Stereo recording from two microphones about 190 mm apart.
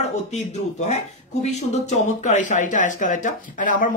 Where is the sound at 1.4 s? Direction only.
35° left (ahead or behind).